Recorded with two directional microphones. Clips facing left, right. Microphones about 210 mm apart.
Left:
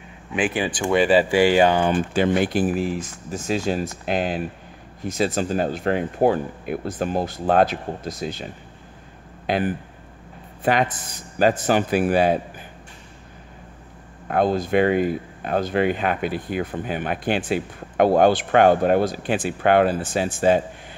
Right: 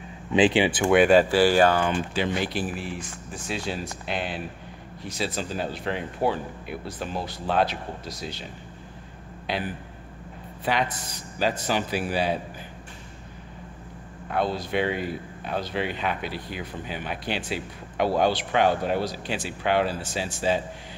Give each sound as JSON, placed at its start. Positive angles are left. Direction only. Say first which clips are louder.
{"t": 0.7, "sound": "speech", "louder": "even", "side_deg": -5}
{"t": 1.3, "sound": "speech", "louder": "left 3 dB", "side_deg": 15}
{"t": 2.0, "sound": "speech", "louder": "left 7 dB", "side_deg": 50}
{"t": 9.5, "sound": "speech", "louder": "left 7 dB", "side_deg": 50}
{"t": 14.2, "sound": "speech", "louder": "left 6 dB", "side_deg": 50}